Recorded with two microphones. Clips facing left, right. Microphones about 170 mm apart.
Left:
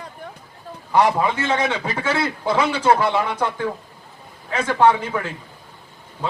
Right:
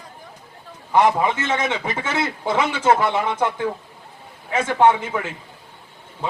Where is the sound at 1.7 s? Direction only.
20° right (ahead or behind).